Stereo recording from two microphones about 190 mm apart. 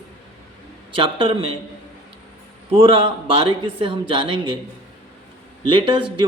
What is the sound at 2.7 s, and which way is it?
A man's voice, 30° right (ahead or behind).